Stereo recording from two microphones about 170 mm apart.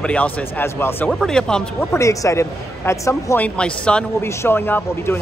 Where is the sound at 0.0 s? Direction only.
10° left (ahead or behind).